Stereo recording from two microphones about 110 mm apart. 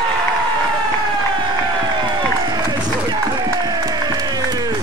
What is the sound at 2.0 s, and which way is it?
Run, 35° right (ahead or behind).